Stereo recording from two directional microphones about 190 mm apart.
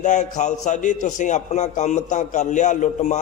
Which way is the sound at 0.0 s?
40° left (ahead or behind).